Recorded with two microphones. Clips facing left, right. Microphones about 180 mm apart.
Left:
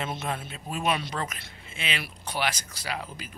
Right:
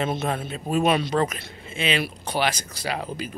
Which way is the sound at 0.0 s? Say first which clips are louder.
Right 7 dB; 35° right (ahead or behind).